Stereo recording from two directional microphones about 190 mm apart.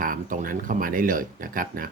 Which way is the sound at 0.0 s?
45° right (ahead or behind).